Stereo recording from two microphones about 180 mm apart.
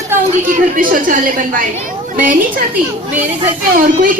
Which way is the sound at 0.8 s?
50° right (ahead or behind).